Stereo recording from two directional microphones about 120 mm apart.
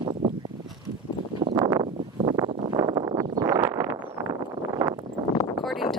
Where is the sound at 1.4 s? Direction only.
35° right (ahead or behind).